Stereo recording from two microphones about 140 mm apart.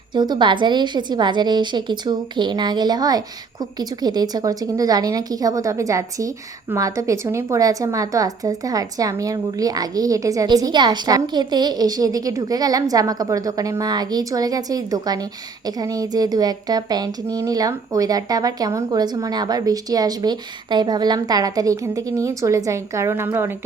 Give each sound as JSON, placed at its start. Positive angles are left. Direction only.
{"t": 0.1, "sound": "a woman's voice", "side_deg": -35}